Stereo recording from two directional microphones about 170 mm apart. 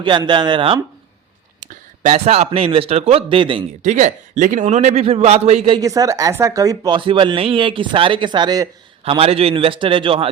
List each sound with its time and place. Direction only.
0.0 s speech: 25° right (ahead or behind)
1.6 s speech: 40° right (ahead or behind)
3.8 s speech: 45° right (ahead or behind)
5.8 s speech: 20° right (ahead or behind)
9.0 s speech: 35° right (ahead or behind)